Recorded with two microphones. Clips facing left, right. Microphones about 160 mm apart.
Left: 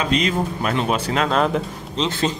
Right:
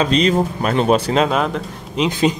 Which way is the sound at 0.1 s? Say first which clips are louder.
Right 5 dB; 30° right (ahead or behind).